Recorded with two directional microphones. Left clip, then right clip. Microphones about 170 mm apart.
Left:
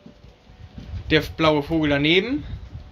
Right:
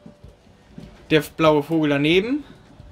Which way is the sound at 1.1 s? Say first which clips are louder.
Right 2 dB; 10° right (ahead or behind).